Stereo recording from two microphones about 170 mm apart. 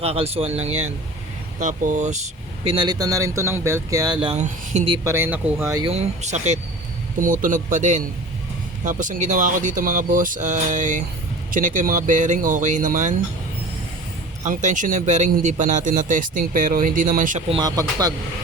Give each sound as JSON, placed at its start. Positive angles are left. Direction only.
{"t": 0.0, "sound": "speech", "side_deg": -35}
{"t": 1.5, "sound": "speech", "side_deg": -50}
{"t": 2.7, "sound": "speech", "side_deg": -25}
{"t": 4.4, "sound": "speech", "side_deg": -45}
{"t": 5.0, "sound": "speech", "side_deg": -15}
{"t": 5.8, "sound": "speech", "side_deg": -35}
{"t": 14.4, "sound": "speech", "side_deg": -45}
{"t": 17.5, "sound": "speech", "side_deg": -20}